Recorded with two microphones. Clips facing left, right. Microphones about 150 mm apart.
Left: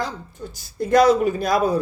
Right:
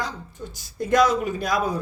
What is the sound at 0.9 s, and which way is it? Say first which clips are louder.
Speech: left 4 dB; 35° left (ahead or behind).